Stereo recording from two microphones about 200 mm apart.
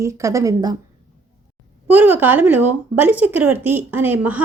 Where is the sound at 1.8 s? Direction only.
10° right (ahead or behind).